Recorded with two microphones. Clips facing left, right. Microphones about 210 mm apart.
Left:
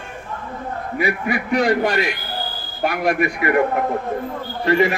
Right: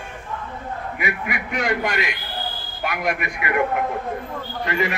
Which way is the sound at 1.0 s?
35° left (ahead or behind).